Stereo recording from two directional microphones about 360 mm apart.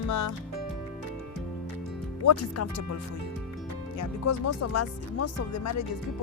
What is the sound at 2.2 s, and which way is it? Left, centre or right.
Speech, left.